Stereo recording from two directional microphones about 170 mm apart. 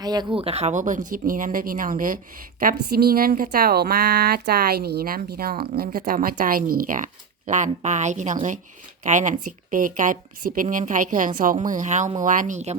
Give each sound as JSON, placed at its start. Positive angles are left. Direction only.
{"t": 0.0, "sound": "a woman's voice", "side_deg": -25}